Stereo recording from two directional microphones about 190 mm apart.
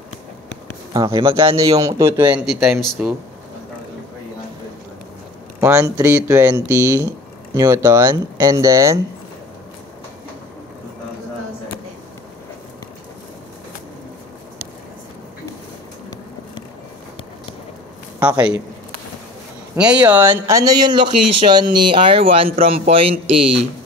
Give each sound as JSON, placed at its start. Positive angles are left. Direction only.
{"t": 0.9, "sound": "a man's voice", "side_deg": -25}
{"t": 5.6, "sound": "a man's voice", "side_deg": -15}
{"t": 19.7, "sound": "a man's voice", "side_deg": -5}